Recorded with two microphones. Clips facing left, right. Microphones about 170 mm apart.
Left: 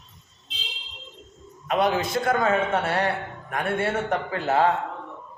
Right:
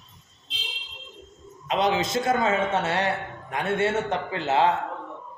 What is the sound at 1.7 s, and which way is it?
A man's voice, 20° right (ahead or behind).